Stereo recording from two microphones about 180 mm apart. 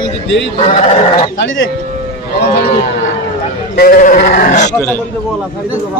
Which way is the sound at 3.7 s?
50° left (ahead or behind).